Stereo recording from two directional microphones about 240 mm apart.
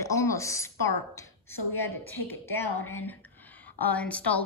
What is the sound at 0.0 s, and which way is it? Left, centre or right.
A woman's voice, centre.